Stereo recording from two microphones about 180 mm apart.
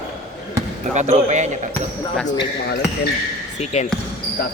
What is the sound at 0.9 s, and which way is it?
Speech, 40° right (ahead or behind).